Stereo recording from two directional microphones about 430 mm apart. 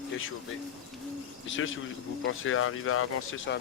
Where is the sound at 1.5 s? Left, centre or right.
Left.